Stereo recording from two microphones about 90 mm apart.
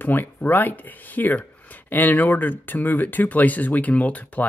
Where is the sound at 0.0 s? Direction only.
20° left (ahead or behind).